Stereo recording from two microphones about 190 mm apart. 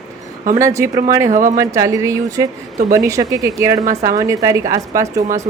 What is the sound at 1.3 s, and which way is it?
Speech, 40° right (ahead or behind).